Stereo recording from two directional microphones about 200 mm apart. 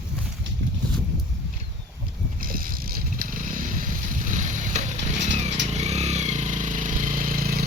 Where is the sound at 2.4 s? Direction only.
45° right (ahead or behind).